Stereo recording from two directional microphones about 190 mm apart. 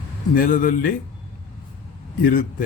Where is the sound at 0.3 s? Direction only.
45° left (ahead or behind).